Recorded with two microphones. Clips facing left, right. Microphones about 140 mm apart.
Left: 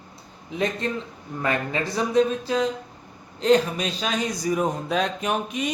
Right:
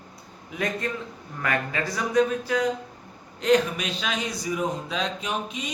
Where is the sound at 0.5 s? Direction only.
25° left (ahead or behind); by 5.7 s 55° left (ahead or behind).